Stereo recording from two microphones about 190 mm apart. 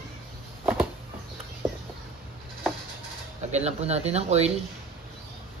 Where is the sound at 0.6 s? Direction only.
10° right (ahead or behind).